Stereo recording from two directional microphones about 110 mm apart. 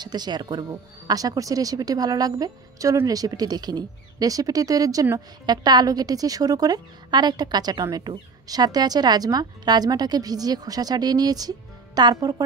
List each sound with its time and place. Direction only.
0.0 s speech: 40° right (ahead or behind)